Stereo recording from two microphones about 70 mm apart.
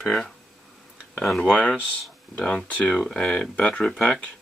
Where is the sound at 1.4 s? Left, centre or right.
Centre.